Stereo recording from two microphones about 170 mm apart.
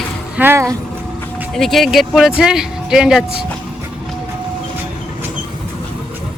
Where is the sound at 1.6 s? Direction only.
Centre (ahead or behind).